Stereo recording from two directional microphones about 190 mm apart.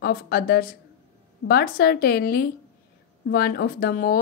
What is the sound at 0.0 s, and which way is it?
Speech, 55° left (ahead or behind).